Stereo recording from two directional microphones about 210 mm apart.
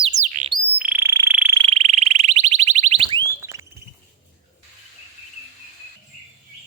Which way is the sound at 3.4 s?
15° right (ahead or behind).